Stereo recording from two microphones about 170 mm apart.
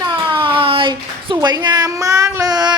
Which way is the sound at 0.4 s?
30° right (ahead or behind).